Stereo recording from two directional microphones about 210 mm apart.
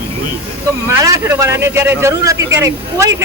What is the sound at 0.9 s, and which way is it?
Speech, 15° right (ahead or behind).